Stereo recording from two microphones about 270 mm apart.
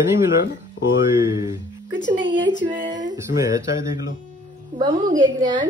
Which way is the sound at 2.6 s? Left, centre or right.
Centre.